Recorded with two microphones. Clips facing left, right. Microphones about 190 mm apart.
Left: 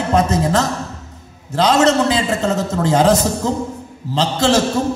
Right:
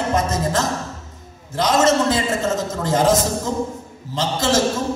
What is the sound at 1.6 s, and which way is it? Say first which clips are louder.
A man's voice: left 3 dB; 65° left (ahead or behind).